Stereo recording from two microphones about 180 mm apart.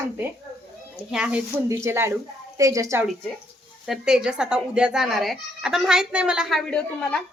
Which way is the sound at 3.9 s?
5° right (ahead or behind).